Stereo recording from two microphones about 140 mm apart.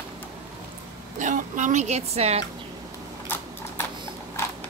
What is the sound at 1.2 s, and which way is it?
Speech, 65° right (ahead or behind).